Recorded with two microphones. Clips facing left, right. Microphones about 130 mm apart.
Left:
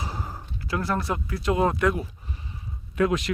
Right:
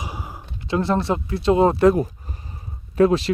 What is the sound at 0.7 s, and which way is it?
Speech, 25° right (ahead or behind).